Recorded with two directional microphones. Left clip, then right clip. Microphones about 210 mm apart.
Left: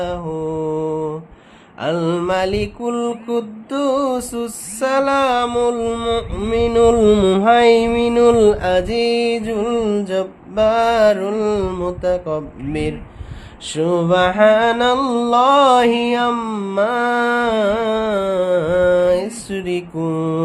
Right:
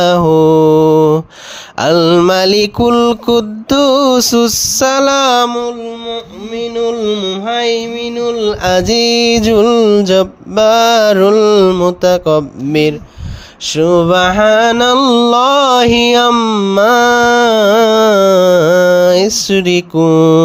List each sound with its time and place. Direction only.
0.0 s mantra: 50° right (ahead or behind)
5.8 s mantra: 25° left (ahead or behind)
8.6 s mantra: 45° right (ahead or behind)
13.7 s mantra: 30° right (ahead or behind)